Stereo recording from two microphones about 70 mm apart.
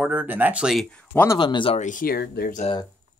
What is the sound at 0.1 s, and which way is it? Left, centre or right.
Speech, right.